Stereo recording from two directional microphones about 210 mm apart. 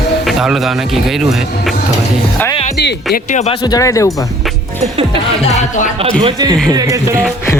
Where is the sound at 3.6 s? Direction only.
15° left (ahead or behind).